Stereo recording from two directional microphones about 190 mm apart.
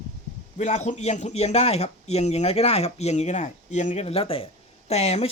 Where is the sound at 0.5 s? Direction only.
35° left (ahead or behind).